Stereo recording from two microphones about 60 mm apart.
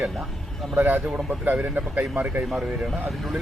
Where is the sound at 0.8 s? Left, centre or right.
Right.